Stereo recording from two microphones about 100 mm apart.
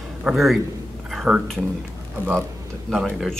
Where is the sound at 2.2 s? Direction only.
20° left (ahead or behind).